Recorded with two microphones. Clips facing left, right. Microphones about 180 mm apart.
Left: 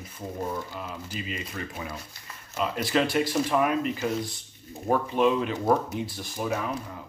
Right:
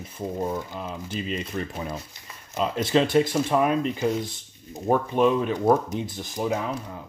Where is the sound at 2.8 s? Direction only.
25° right (ahead or behind).